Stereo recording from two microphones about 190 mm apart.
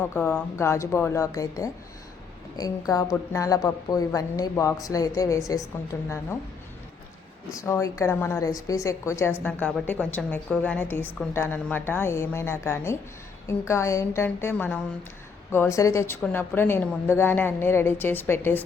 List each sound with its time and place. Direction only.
0.0 s a woman's voice: 10° left (ahead or behind)
7.5 s a woman's voice: 15° left (ahead or behind)